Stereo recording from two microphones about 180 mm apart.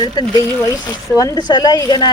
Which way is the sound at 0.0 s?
25° left (ahead or behind).